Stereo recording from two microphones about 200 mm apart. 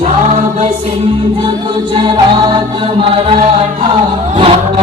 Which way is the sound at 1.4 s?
25° right (ahead or behind).